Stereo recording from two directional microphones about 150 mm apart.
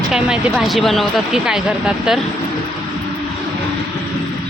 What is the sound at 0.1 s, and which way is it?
Speech, 5° right (ahead or behind).